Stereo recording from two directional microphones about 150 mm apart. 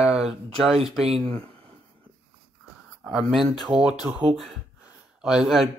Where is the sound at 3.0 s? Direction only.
Centre (ahead or behind).